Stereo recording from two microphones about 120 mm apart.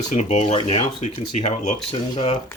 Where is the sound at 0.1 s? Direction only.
70° left (ahead or behind).